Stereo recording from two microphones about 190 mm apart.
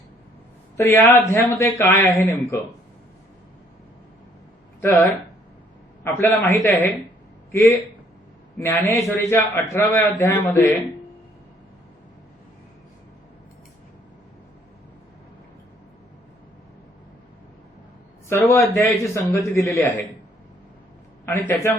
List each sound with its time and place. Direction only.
0.8 s a man's voice: 10° left (ahead or behind)
4.8 s a man's voice: 10° left (ahead or behind)
18.3 s a man's voice: 15° left (ahead or behind)
21.2 s a man's voice: 10° left (ahead or behind)